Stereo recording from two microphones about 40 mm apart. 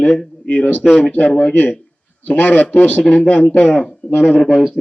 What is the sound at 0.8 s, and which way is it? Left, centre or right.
Speech, left.